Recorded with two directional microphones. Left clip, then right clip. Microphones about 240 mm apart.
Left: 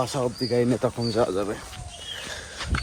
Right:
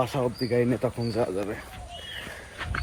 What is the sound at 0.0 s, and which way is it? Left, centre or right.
Speech, centre.